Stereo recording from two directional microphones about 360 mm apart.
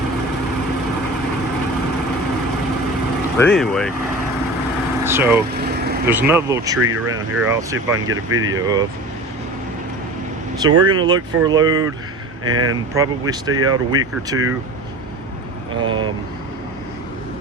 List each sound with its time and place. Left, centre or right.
3.3 s speech: centre
5.0 s speech: centre
5.5 s vehicle: right
6.1 s speech: centre
6.7 s speech: right
7.4 s speech: centre
8.1 s speech: right
8.4 s speech: centre
10.6 s speech: centre
12.9 s speech: centre
15.7 s speech: centre